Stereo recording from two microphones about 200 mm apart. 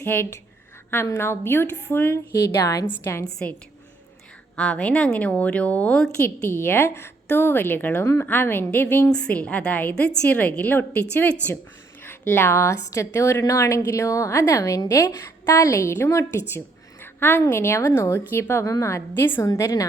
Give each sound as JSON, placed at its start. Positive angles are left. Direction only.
{"t": 0.0, "sound": "a woman's voice", "side_deg": 10}
{"t": 4.5, "sound": "a woman's voice", "side_deg": 5}